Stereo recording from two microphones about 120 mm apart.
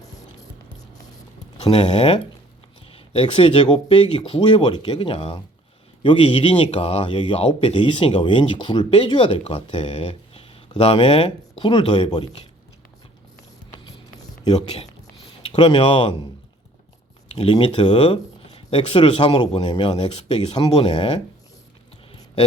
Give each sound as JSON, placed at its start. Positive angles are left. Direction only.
{"t": 1.9, "sound": "speech", "side_deg": 60}
{"t": 15.5, "sound": "speech", "side_deg": 40}
{"t": 17.3, "sound": "speech", "side_deg": 45}
{"t": 20.7, "sound": "speech", "side_deg": 50}